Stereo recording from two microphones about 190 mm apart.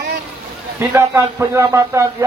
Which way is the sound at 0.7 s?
15° right (ahead or behind).